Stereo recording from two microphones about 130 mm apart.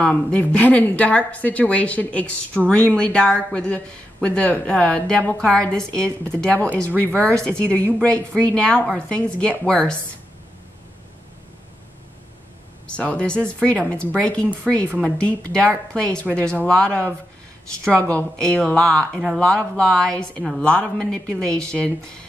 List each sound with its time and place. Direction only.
0.0 s speech: 10° left (ahead or behind)
12.9 s speech: 10° left (ahead or behind)